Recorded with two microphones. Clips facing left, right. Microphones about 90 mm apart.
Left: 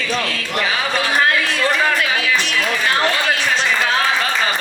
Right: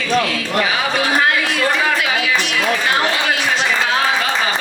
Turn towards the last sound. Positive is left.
turn(degrees=40)  # may be behind; listen again after turning